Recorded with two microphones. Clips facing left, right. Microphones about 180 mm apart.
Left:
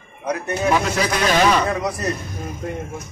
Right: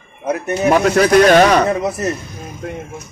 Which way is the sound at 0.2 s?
25° right (ahead or behind).